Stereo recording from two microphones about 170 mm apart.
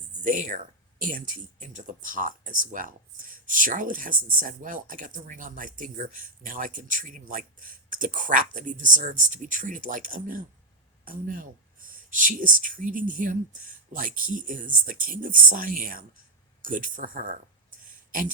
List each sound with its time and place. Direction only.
0.3 s speech: 50° right (ahead or behind)